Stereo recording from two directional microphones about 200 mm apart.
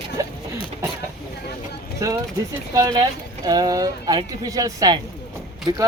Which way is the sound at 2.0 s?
15° right (ahead or behind).